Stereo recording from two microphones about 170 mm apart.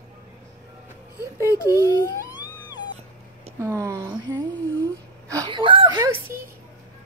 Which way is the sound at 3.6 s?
15° right (ahead or behind).